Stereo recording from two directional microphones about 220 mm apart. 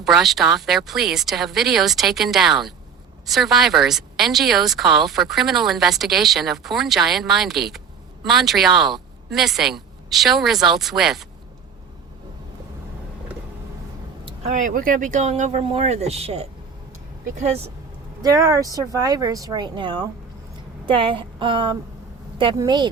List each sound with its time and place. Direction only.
0.0 s a woman's voice: centre (ahead or behind)
14.3 s speech: 30° right (ahead or behind)
18.2 s speech: 15° right (ahead or behind)